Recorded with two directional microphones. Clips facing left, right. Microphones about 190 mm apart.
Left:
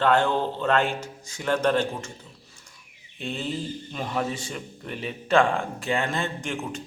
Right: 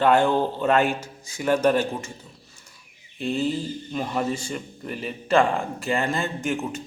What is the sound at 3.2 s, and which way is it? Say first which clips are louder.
Speech: right 6 dB; centre (ahead or behind).